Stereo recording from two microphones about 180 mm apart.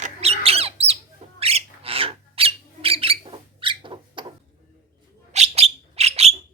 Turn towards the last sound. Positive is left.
turn(degrees=-35)  # may be behind; listen again after turning